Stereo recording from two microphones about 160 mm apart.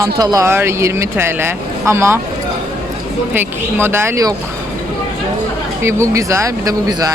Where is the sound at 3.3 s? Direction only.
15° right (ahead or behind).